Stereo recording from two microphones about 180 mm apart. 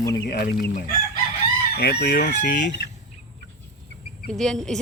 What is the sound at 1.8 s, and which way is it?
Chicken, 60° left (ahead or behind).